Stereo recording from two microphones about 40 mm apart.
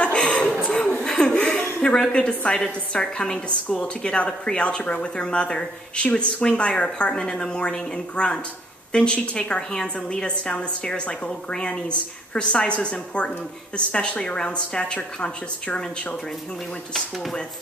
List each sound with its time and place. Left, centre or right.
0.0 s chuckle: left
0.6 s a sound: left
1.0 s chuckle: left
1.8 s a woman's voice: left